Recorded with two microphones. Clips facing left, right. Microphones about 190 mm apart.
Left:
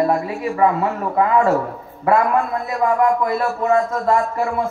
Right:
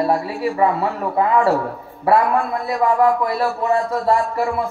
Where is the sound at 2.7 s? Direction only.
35° right (ahead or behind).